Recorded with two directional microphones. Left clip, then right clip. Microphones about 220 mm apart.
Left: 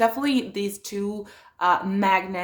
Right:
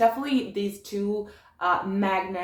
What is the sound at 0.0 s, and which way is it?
Speech, 45° left (ahead or behind).